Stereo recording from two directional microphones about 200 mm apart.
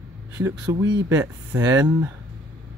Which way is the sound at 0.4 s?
15° right (ahead or behind).